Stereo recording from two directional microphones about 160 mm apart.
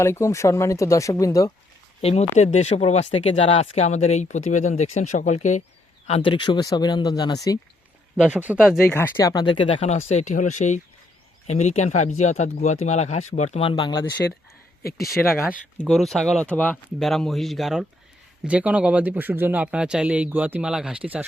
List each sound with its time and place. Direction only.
0.0 s speech: 15° left (ahead or behind)
2.0 s speech: 40° left (ahead or behind)
6.1 s speech: 35° left (ahead or behind)
8.1 s speech: 5° right (ahead or behind)
8.9 s speech: 15° left (ahead or behind)
14.2 s speech: 10° left (ahead or behind)
15.1 s speech: 10° right (ahead or behind)
15.9 s speech: centre (ahead or behind)